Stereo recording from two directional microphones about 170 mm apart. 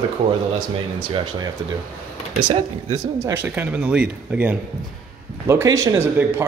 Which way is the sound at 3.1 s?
15° right (ahead or behind).